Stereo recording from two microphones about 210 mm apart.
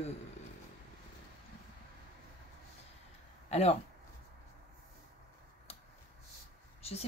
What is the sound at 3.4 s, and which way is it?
Speech, 30° left (ahead or behind).